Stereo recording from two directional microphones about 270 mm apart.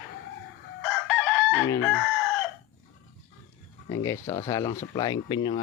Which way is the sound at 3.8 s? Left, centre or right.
Centre.